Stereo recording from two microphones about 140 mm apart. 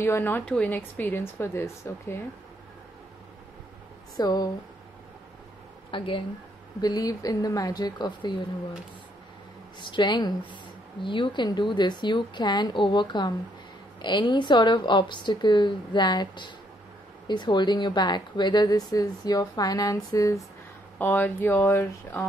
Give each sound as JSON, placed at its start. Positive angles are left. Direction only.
{"t": 0.0, "sound": "a woman's voice", "side_deg": 15}
{"t": 4.2, "sound": "a woman's voice", "side_deg": 30}
{"t": 5.9, "sound": "a woman's voice", "side_deg": 40}
{"t": 9.8, "sound": "a woman's voice", "side_deg": 35}
{"t": 21.0, "sound": "a woman's voice", "side_deg": 10}